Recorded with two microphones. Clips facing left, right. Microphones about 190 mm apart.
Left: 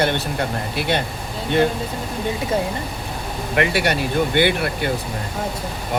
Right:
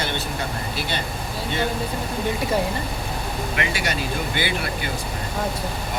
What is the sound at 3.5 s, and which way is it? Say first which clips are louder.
Speech: left 9 dB; 60° left (ahead or behind).